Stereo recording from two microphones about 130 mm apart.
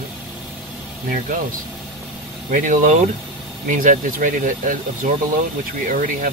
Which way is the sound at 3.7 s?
90° right.